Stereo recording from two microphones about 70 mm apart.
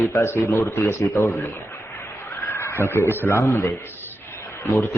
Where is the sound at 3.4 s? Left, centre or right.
Left.